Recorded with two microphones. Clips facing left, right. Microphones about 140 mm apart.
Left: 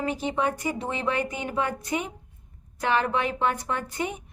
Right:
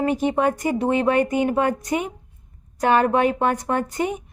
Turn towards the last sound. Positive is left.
turn(degrees=-45)  # may be behind; listen again after turning